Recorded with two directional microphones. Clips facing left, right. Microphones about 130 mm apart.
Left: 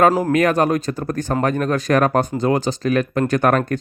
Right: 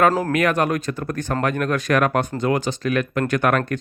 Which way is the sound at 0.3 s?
35° left (ahead or behind).